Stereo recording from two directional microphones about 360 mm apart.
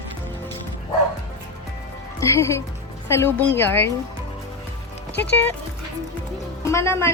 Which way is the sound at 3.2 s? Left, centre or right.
Centre.